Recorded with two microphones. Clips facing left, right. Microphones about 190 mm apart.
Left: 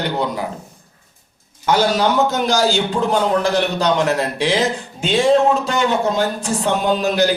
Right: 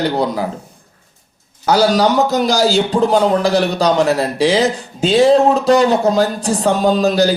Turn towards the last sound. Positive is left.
turn(degrees=-35)  # may be behind; listen again after turning